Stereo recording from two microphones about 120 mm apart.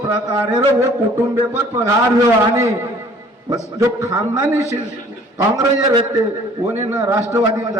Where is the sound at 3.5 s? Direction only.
25° right (ahead or behind).